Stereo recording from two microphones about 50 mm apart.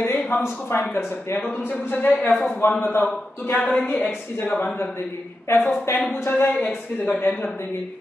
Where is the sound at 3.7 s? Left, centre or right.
Left.